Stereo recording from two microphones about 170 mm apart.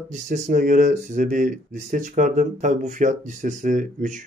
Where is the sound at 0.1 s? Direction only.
45° right (ahead or behind).